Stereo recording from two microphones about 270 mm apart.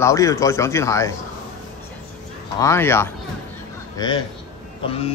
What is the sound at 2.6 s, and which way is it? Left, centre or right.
A man's voice, centre.